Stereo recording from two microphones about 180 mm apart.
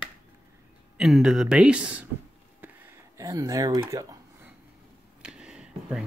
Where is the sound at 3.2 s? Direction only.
20° right (ahead or behind).